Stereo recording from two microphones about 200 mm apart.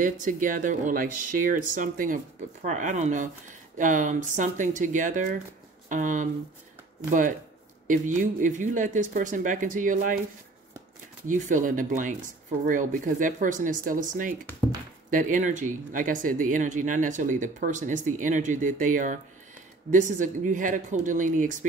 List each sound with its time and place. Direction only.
0.0 s speech: 40° right (ahead or behind)
11.2 s speech: 40° right (ahead or behind)